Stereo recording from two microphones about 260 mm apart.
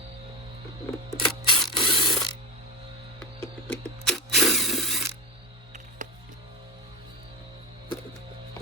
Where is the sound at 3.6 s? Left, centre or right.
Centre.